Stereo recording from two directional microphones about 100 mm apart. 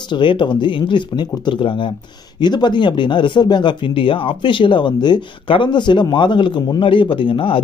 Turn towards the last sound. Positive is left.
turn(degrees=60)  # may be behind; listen again after turning